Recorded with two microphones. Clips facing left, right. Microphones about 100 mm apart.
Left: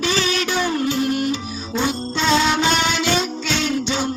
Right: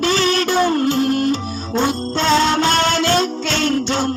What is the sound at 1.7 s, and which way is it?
Music, 50° right (ahead or behind).